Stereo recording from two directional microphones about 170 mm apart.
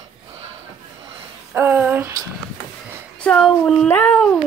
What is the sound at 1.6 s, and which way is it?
Speech, 10° right (ahead or behind).